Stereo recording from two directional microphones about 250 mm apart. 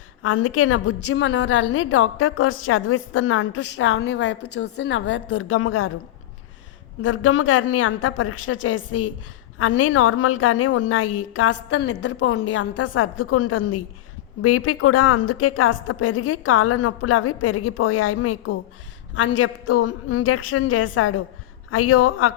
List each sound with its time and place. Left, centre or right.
0.2 s a woman's voice: left
7.0 s a woman's voice: left